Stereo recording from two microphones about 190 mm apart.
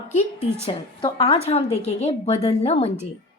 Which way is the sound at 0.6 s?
30° left (ahead or behind).